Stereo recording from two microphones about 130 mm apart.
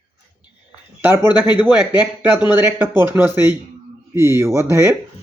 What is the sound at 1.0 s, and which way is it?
Speech, 20° right (ahead or behind).